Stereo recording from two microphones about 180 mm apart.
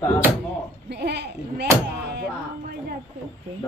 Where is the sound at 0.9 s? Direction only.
70° right (ahead or behind).